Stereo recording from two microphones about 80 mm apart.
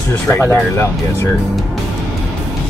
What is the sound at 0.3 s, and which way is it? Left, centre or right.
Speech, left.